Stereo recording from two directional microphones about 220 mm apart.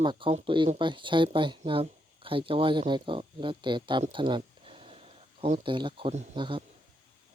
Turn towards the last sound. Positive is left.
turn(degrees=-25)  # may be behind; listen again after turning